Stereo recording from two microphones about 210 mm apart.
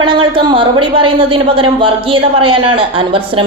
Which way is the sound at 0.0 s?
25° right (ahead or behind).